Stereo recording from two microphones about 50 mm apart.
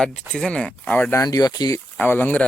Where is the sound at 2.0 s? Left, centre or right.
Left.